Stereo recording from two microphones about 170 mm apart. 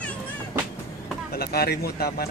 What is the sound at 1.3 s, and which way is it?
Speech, 65° left (ahead or behind).